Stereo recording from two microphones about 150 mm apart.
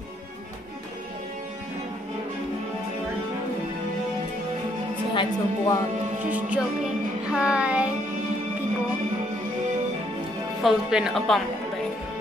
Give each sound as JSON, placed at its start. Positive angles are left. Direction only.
{"t": 5.1, "sound": "a woman's voice", "side_deg": 30}
{"t": 6.3, "sound": "music", "side_deg": -10}
{"t": 7.3, "sound": "child singing", "side_deg": -5}
{"t": 10.6, "sound": "speech", "side_deg": -5}